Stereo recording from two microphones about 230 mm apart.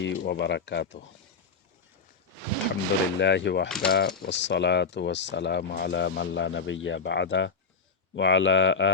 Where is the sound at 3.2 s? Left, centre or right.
Left.